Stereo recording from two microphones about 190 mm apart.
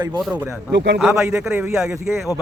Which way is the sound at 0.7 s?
60° right (ahead or behind).